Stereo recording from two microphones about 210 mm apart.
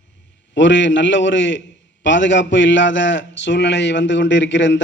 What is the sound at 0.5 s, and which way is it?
A man's voice, 60° left (ahead or behind).